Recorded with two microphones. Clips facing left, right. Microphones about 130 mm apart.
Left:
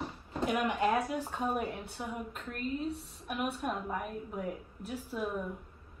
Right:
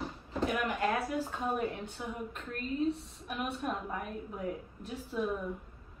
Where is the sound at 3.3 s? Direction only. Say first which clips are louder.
Left 1 dB; 5° left (ahead or behind).